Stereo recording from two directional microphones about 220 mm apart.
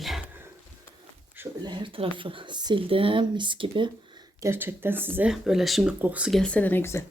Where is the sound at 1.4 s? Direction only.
20° right (ahead or behind).